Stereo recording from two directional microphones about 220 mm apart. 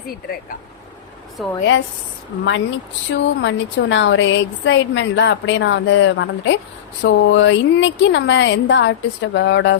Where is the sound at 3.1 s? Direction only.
55° left (ahead or behind).